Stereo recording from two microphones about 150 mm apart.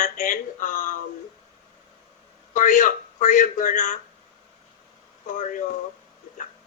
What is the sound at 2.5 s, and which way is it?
Speech, 60° left (ahead or behind).